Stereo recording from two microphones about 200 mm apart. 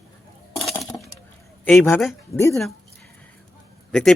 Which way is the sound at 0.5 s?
Centre (ahead or behind).